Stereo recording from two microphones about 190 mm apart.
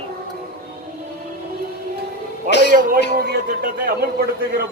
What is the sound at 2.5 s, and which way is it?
Speech, 65° left (ahead or behind).